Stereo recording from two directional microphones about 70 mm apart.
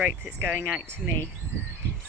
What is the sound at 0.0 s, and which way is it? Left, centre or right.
Speech, right.